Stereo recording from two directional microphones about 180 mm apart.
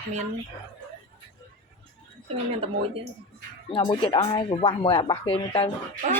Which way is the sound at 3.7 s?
30° left (ahead or behind).